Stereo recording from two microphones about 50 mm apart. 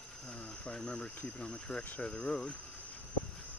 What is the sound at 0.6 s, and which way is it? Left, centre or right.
Speech, centre.